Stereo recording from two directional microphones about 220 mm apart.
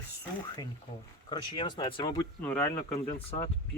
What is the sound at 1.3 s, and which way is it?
Speech, 20° left (ahead or behind).